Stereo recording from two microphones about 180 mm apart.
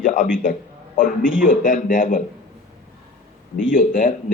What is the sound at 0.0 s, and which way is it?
A man's voice, 45° left (ahead or behind).